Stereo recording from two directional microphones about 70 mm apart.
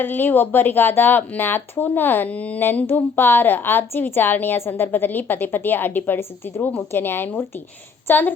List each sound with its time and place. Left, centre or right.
0.0 s a woman's voice: left